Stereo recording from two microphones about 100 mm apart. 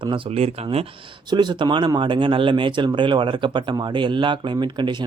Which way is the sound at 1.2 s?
50° right (ahead or behind).